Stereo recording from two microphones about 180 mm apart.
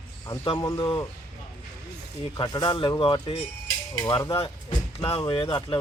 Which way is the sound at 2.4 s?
25° left (ahead or behind).